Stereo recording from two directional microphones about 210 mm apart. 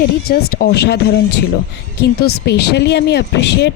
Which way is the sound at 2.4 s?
55° left (ahead or behind).